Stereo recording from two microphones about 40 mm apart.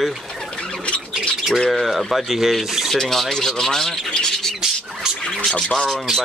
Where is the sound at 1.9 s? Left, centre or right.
Centre.